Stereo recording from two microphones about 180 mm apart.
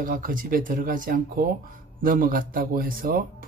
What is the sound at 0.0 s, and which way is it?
Speech, 50° right (ahead or behind).